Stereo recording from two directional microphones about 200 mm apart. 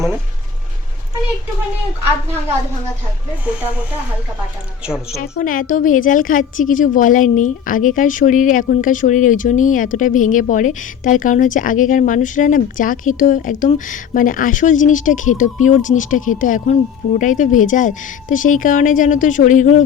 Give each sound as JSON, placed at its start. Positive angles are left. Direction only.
{"t": 5.1, "sound": "a woman's voice", "side_deg": 50}